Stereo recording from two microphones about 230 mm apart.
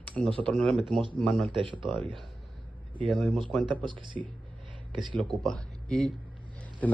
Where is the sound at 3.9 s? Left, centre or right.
Right.